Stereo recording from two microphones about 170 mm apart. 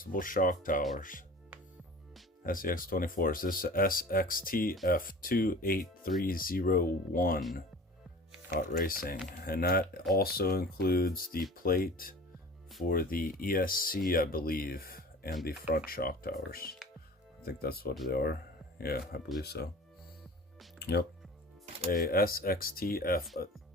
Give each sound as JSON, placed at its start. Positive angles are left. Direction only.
{"t": 0.0, "sound": "speech", "side_deg": 55}
{"t": 2.4, "sound": "speech", "side_deg": 55}
{"t": 8.4, "sound": "speech", "side_deg": 55}
{"t": 17.4, "sound": "speech", "side_deg": 65}
{"t": 20.7, "sound": "speech", "side_deg": 75}
{"t": 21.8, "sound": "speech", "side_deg": 60}